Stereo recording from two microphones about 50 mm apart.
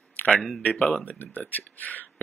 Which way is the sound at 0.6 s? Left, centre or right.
Left.